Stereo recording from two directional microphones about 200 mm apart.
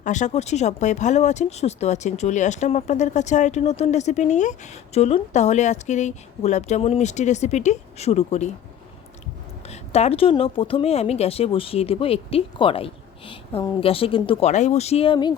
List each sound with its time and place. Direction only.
0.0 s speech: 35° left (ahead or behind)
9.6 s speech: 30° left (ahead or behind)